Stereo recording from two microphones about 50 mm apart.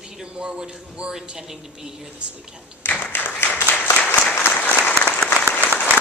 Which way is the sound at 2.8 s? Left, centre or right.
Left.